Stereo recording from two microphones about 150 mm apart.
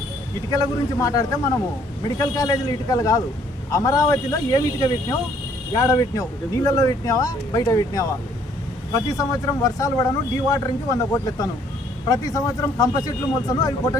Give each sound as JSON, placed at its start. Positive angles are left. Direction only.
{"t": 0.5, "sound": "speech", "side_deg": 25}